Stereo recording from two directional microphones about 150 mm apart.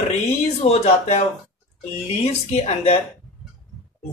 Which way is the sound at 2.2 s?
45° left (ahead or behind).